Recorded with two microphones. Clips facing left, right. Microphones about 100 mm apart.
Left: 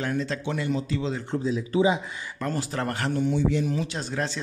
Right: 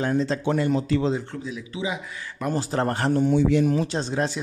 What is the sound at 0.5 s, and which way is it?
Speech, 45° right (ahead or behind).